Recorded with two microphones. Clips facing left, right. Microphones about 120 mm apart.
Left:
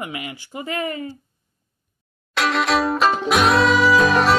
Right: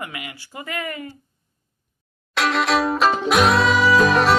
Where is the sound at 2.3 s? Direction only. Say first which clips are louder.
Even; centre (ahead or behind).